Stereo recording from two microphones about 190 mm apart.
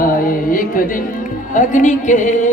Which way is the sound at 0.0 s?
50° left (ahead or behind).